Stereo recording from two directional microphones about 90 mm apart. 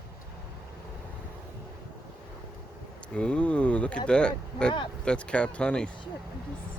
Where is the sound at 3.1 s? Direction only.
10° left (ahead or behind).